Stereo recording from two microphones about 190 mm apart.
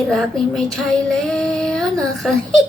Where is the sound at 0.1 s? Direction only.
Centre (ahead or behind).